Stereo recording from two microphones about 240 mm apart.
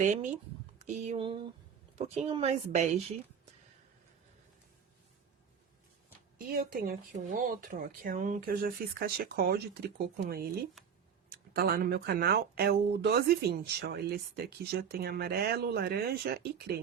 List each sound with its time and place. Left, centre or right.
0.0 s a woman's voice: right
6.4 s speech: right